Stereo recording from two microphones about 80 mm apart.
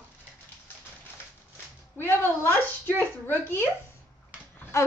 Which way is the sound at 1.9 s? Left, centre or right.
Left.